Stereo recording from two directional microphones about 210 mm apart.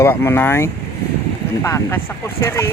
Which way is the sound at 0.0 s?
10° left (ahead or behind).